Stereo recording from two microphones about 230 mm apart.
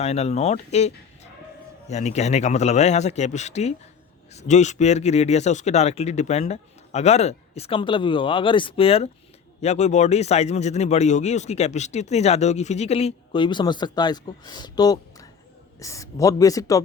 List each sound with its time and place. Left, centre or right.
0.0 s a man's voice: left